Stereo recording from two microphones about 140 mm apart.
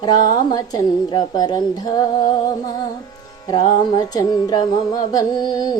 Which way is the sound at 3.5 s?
30° left (ahead or behind).